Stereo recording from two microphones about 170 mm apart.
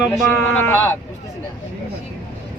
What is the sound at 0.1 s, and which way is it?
Speech, 15° left (ahead or behind).